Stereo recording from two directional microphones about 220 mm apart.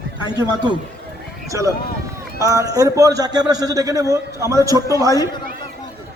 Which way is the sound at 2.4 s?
15° right (ahead or behind).